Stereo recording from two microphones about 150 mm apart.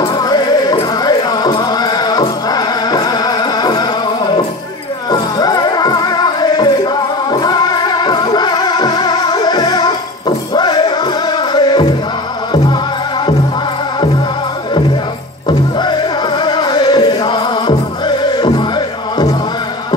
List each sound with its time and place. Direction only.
0.0 s music: 25° left (ahead or behind)
15.4 s music: 30° left (ahead or behind)